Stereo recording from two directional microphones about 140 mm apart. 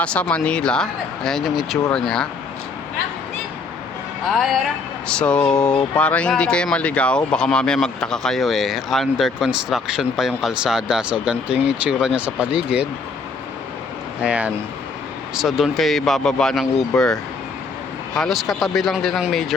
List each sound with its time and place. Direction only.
0.0 s speech: 10° left (ahead or behind)
4.3 s speech: centre (ahead or behind)
14.2 s speech: 10° right (ahead or behind)
18.1 s speech: centre (ahead or behind)